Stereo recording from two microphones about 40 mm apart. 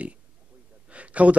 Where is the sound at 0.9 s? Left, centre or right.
Right.